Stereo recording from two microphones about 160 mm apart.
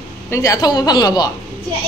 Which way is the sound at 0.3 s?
20° left (ahead or behind).